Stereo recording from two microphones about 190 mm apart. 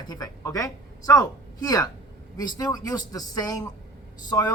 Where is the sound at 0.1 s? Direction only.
20° left (ahead or behind).